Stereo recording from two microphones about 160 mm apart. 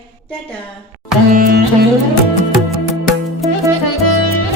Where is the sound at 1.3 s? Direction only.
70° right (ahead or behind).